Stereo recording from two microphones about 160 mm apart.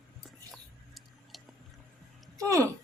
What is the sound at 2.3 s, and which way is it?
Speech, 20° right (ahead or behind).